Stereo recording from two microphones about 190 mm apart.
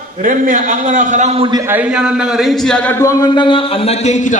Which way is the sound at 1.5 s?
15° right (ahead or behind).